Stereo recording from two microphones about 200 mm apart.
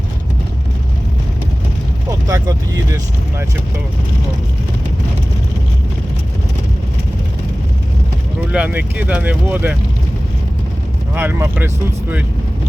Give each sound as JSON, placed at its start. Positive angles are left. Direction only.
{"t": 2.2, "sound": "speech", "side_deg": -15}
{"t": 8.5, "sound": "speech", "side_deg": -5}
{"t": 11.1, "sound": "speech", "side_deg": -10}